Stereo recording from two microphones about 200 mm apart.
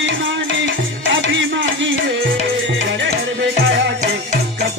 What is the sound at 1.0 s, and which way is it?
Music, 65° right (ahead or behind).